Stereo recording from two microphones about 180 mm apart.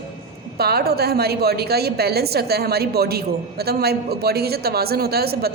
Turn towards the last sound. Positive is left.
turn(degrees=-60)  # may be behind; listen again after turning